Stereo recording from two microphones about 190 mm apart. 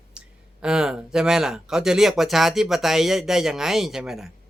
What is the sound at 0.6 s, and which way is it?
Speech, 5° right (ahead or behind).